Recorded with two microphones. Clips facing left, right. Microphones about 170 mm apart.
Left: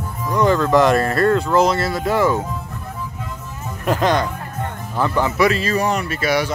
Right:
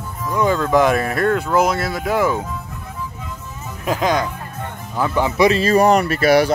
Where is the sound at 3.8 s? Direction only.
Centre (ahead or behind).